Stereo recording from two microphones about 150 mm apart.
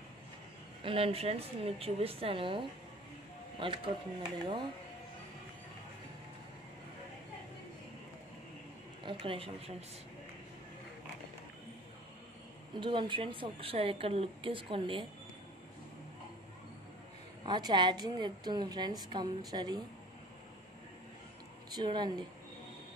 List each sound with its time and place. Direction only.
0.8 s a woman's voice: 40° right (ahead or behind)
9.0 s a woman's voice: 35° right (ahead or behind)
12.8 s a woman's voice: 35° right (ahead or behind)
17.5 s a woman's voice: 30° right (ahead or behind)
21.7 s a woman's voice: 30° right (ahead or behind)